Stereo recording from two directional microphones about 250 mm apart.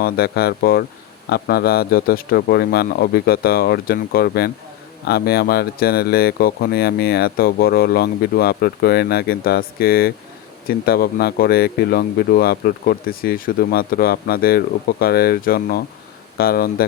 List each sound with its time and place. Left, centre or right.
0.0 s speech: left